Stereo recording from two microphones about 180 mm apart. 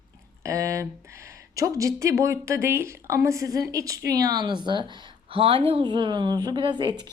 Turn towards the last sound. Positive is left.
turn(degrees=-25)  # may be behind; listen again after turning